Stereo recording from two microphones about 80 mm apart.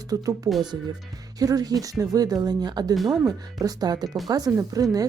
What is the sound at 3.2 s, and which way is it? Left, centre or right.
Speech, right.